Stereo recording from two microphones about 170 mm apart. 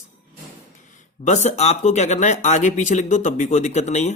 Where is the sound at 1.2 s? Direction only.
45° left (ahead or behind).